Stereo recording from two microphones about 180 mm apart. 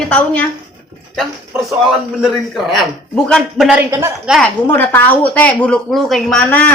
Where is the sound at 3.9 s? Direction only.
15° right (ahead or behind).